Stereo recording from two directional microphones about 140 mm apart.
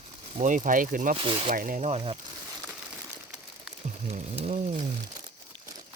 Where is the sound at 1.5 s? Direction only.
80° right.